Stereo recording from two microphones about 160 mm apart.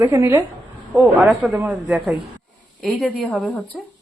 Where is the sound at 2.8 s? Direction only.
10° left (ahead or behind).